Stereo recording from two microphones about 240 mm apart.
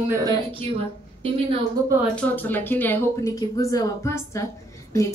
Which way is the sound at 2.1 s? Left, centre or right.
Centre.